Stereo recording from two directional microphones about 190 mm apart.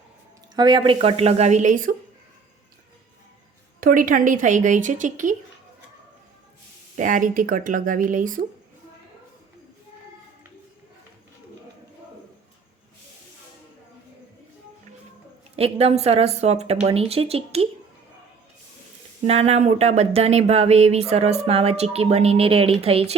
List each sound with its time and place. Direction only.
0.5 s speech: 25° right (ahead or behind); by 2.0 s 45° right (ahead or behind)
3.8 s speech: 45° right (ahead or behind)
6.9 s speech: 45° right (ahead or behind)
15.5 s speech: 30° right (ahead or behind)
19.3 s speech: 35° right (ahead or behind)